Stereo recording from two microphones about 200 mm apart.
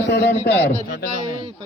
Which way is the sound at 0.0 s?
60° left (ahead or behind).